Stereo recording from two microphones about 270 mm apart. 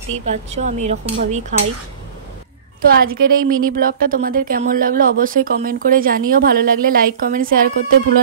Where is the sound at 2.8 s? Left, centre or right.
Right.